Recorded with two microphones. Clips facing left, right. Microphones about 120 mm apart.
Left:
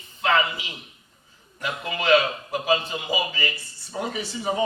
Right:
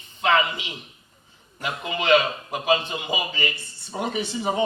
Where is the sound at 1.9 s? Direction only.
20° right (ahead or behind).